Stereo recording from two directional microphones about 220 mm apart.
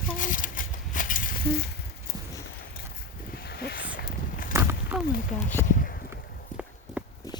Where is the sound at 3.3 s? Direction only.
45° left (ahead or behind).